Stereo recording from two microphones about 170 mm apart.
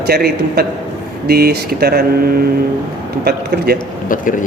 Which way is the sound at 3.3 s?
70° right (ahead or behind).